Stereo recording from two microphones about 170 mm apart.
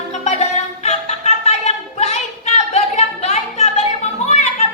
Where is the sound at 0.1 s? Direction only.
40° left (ahead or behind).